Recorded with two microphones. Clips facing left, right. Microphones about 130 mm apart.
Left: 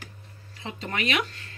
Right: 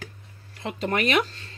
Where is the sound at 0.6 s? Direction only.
60° right (ahead or behind); by 1.5 s 30° right (ahead or behind).